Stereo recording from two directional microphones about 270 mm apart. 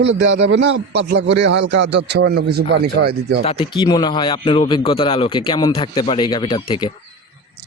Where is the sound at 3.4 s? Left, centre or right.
Centre.